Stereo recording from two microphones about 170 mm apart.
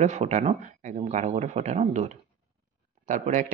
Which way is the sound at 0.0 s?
40° right (ahead or behind).